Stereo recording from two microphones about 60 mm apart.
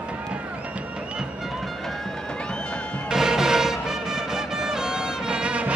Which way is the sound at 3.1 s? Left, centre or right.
Centre.